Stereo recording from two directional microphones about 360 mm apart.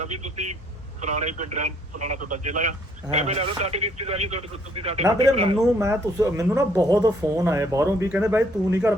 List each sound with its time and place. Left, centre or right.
1.0 s a man's voice: centre
5.5 s speech: centre